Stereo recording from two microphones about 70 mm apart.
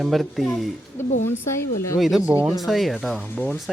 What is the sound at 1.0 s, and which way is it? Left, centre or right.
Speech, left.